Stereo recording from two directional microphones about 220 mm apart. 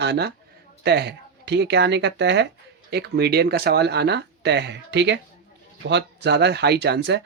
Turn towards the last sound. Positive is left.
turn(degrees=-50)  # may be behind; listen again after turning